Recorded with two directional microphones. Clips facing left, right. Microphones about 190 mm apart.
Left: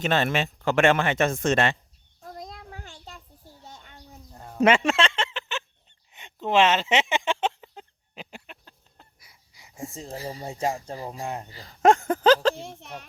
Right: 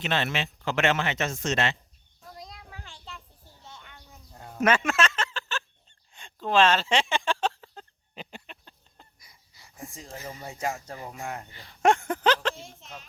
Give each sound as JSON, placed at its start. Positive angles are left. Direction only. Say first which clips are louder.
{"t": 0.0, "sound": "speech", "louder": "left 5 dB", "side_deg": 45}
{"t": 2.2, "sound": "child singing", "louder": "left 5 dB", "side_deg": 45}
{"t": 3.6, "sound": "a sound", "louder": "left 1 dB", "side_deg": 35}
{"t": 4.5, "sound": "speech", "louder": "left 4 dB", "side_deg": 25}
{"t": 4.9, "sound": "a sound", "louder": "left 2 dB", "side_deg": 30}
{"t": 6.1, "sound": "speech", "louder": "left 1 dB", "side_deg": 20}
{"t": 8.1, "sound": "speech", "louder": "even", "side_deg": 5}
{"t": 12.6, "sound": "speech", "louder": "left 6 dB", "side_deg": 60}